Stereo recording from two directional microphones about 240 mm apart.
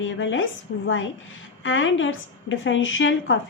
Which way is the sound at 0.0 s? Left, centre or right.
Left.